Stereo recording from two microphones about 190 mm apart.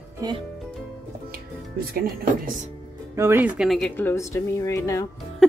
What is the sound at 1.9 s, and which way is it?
Speech, 50° right (ahead or behind).